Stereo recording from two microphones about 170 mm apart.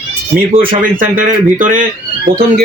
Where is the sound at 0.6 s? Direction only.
55° right (ahead or behind).